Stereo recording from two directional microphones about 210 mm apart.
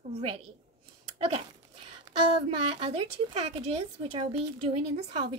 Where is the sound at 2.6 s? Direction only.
25° right (ahead or behind).